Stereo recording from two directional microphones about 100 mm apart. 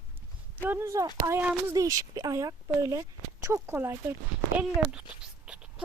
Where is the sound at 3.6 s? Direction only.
20° right (ahead or behind).